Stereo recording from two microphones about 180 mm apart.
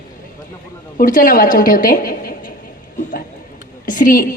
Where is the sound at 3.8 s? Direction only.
50° left (ahead or behind).